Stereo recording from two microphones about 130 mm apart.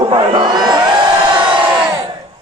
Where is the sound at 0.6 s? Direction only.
35° right (ahead or behind).